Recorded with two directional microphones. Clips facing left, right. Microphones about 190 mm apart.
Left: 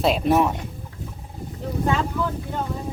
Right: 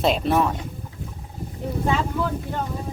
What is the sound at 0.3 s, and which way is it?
Speech, 15° left (ahead or behind).